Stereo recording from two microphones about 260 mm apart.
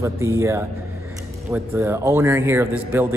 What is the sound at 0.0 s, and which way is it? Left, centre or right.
A man's voice, centre.